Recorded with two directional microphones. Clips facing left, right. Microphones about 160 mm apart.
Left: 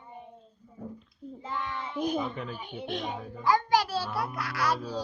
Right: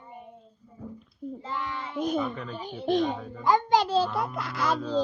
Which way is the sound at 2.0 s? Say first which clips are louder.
Right 2 dB; centre (ahead or behind).